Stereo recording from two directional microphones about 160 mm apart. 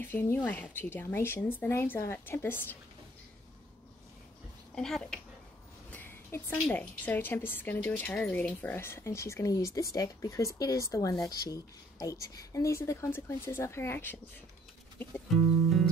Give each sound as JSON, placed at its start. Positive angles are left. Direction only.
{"t": 0.0, "sound": "a woman's voice", "side_deg": 15}
{"t": 4.7, "sound": "a woman's voice", "side_deg": 5}